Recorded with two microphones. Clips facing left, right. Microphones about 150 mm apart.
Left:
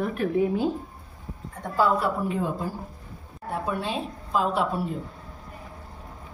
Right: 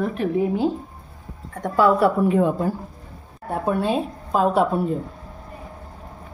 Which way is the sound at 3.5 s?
50° right (ahead or behind).